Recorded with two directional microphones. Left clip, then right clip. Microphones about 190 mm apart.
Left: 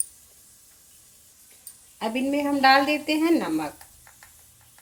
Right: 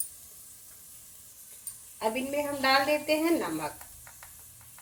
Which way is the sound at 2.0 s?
60° left (ahead or behind).